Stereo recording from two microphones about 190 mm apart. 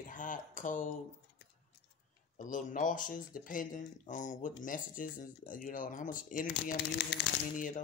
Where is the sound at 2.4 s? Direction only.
45° left (ahead or behind).